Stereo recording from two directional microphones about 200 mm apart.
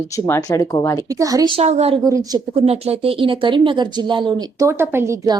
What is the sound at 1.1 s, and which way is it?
Speech, 15° right (ahead or behind).